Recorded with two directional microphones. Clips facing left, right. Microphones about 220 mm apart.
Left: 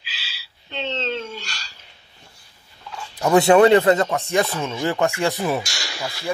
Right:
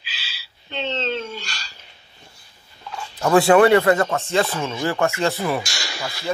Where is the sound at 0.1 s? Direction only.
55° right (ahead or behind).